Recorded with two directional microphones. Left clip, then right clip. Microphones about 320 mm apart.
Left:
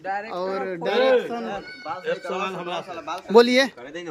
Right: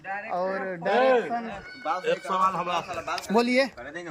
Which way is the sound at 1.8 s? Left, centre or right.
Right.